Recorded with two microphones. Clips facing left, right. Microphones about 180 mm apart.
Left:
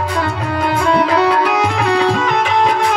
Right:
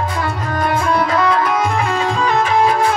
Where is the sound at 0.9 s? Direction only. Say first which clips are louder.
Left 4 dB; 80° left.